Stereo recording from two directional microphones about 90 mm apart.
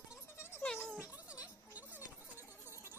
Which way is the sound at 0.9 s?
15° right (ahead or behind).